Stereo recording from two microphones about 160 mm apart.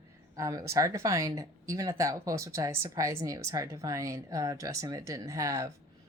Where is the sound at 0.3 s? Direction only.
20° right (ahead or behind).